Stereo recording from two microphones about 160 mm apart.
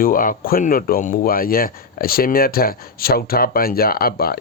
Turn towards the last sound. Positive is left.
turn(degrees=70)  # may be behind; listen again after turning